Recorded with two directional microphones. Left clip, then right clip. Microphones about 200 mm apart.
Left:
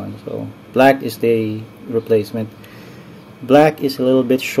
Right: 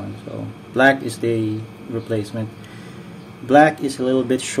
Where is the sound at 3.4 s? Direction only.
30° left (ahead or behind).